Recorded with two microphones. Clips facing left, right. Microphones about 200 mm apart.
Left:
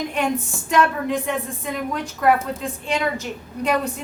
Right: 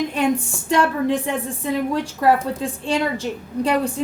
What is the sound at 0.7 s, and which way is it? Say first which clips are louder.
A woman's voice: right 2 dB; 30° right (ahead or behind).